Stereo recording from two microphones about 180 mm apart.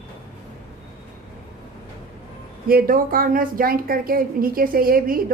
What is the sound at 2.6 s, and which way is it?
A woman's voice, 55° right (ahead or behind).